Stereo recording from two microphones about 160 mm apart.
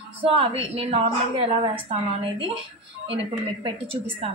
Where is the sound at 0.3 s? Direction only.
35° right (ahead or behind).